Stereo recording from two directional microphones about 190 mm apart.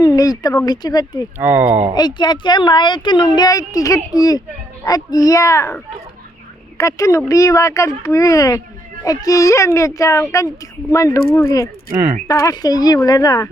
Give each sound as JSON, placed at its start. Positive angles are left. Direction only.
{"t": 0.0, "sound": "speech", "side_deg": 20}
{"t": 1.4, "sound": "speech", "side_deg": -10}
{"t": 2.0, "sound": "speech", "side_deg": 20}
{"t": 11.9, "sound": "speech", "side_deg": -15}
{"t": 12.3, "sound": "speech", "side_deg": 15}